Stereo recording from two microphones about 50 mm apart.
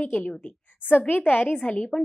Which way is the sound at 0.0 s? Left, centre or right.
Left.